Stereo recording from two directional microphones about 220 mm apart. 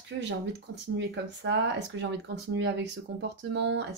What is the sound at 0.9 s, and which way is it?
Speech, 55° right (ahead or behind).